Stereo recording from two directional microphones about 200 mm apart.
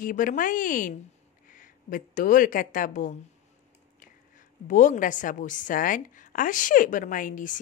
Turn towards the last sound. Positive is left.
turn(degrees=40)  # may be behind; listen again after turning